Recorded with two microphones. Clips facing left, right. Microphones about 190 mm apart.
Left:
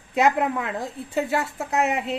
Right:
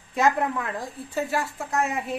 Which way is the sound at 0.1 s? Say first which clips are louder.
Left 2 dB; 20° left (ahead or behind).